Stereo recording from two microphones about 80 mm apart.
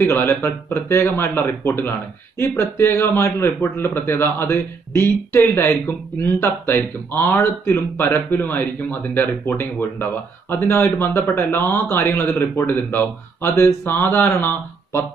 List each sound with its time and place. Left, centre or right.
0.1 s speech: left
10.6 s speech: left